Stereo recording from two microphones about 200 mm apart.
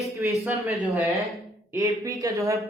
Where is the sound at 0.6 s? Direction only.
10° right (ahead or behind).